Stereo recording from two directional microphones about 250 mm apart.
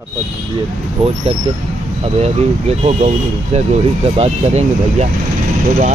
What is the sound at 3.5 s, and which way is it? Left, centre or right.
Speech, right.